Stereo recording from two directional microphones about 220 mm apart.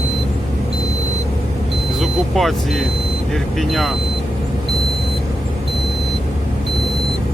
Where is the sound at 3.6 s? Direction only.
Centre (ahead or behind).